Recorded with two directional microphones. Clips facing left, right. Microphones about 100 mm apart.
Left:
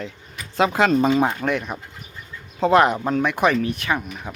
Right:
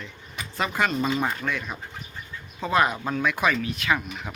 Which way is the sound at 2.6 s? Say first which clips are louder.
Left 7 dB; 65° left (ahead or behind).